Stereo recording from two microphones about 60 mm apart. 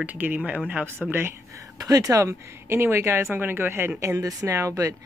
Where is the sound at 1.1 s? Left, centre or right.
Right.